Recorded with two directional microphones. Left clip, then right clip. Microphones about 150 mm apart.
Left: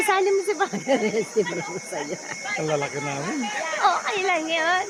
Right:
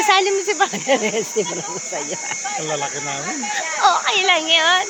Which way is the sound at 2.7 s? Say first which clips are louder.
Right 2 dB; 40° left (ahead or behind).